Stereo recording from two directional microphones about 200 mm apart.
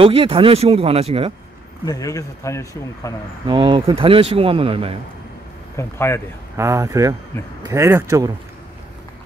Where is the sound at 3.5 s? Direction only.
25° right (ahead or behind).